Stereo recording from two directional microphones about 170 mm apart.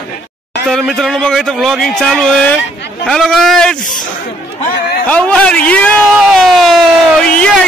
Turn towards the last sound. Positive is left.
turn(degrees=5)  # may be behind; listen again after turning